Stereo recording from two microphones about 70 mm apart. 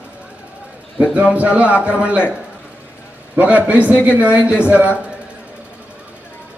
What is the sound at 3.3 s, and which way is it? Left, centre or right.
A man's voice, right.